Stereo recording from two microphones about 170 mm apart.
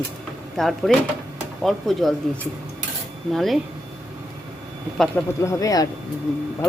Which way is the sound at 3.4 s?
Centre (ahead or behind).